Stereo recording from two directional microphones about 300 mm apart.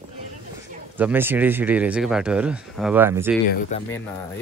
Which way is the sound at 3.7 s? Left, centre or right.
Left.